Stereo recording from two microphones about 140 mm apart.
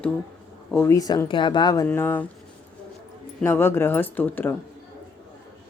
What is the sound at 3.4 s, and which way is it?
A woman's voice, 15° left (ahead or behind).